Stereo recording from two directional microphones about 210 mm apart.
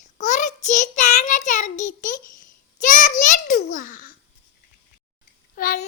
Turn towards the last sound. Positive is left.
turn(degrees=45)  # may be behind; listen again after turning